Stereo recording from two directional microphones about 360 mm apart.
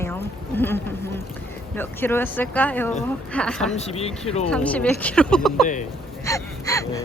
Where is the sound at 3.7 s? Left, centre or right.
Centre.